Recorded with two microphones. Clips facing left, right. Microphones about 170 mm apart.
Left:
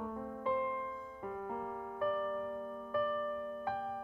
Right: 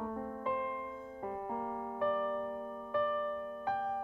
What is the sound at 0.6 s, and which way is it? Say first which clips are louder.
Music: even; 30° right (ahead or behind).